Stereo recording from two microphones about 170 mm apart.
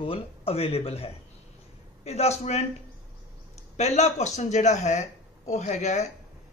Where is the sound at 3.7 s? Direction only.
40° left (ahead or behind).